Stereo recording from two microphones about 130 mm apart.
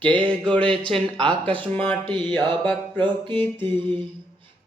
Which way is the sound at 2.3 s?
10° left (ahead or behind).